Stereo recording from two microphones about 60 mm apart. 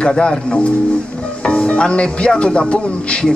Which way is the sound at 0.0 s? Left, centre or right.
Centre.